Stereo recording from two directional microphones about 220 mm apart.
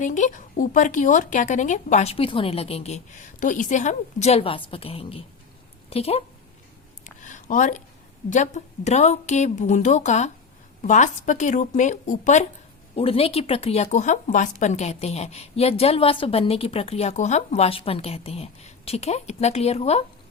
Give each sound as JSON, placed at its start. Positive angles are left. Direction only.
{"t": 0.0, "sound": "a woman's voice", "side_deg": 35}
{"t": 7.0, "sound": "a sound", "side_deg": 35}
{"t": 8.3, "sound": "a woman's voice", "side_deg": 35}